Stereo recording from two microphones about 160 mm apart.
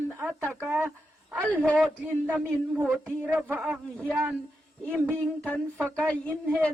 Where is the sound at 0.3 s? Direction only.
5° left (ahead or behind).